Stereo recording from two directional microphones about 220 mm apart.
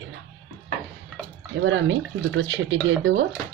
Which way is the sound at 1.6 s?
55° right (ahead or behind).